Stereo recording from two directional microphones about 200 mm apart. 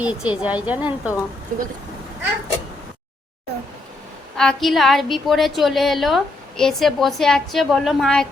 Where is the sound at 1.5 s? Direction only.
40° right (ahead or behind).